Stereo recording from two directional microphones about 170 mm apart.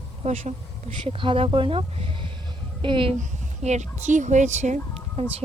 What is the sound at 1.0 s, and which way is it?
Speech, 30° right (ahead or behind).